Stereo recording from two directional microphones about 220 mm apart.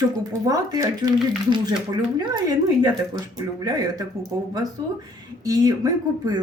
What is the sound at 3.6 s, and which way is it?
Speech, 15° right (ahead or behind).